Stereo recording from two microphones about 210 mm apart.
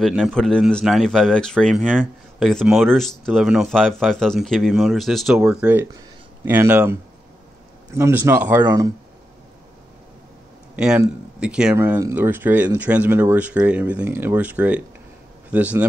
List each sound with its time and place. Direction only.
0.0 s speech: centre (ahead or behind)
10.8 s speech: 5° right (ahead or behind)